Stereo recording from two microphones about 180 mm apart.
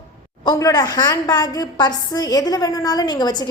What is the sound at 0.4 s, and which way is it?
A woman's voice, 20° left (ahead or behind).